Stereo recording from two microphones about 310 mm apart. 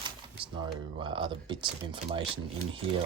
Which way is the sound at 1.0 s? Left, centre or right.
Centre.